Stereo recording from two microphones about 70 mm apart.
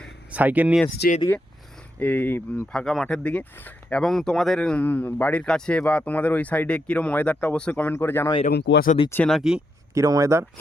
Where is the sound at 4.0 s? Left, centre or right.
Centre.